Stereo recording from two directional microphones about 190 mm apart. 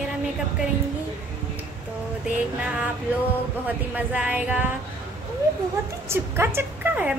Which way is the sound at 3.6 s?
5° right (ahead or behind).